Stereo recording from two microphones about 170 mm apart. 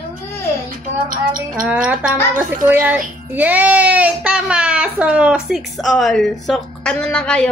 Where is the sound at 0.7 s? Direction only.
55° right (ahead or behind).